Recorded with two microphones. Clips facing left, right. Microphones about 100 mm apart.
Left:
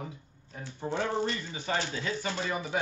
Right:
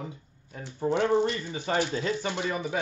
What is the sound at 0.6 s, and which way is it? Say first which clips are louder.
Speech: right 7 dB; 20° right (ahead or behind).